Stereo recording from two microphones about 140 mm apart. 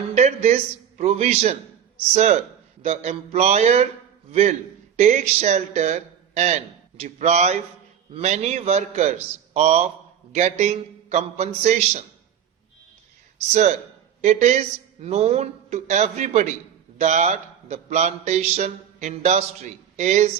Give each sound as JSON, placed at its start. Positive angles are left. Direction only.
{"t": 0.1, "sound": "a man's voice", "side_deg": -55}
{"t": 13.5, "sound": "a man's voice", "side_deg": -55}